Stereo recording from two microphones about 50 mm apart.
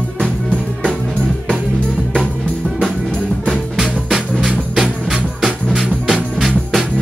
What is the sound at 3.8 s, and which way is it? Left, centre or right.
Music, centre.